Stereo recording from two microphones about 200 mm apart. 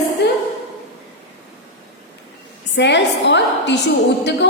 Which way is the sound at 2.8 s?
60° left (ahead or behind).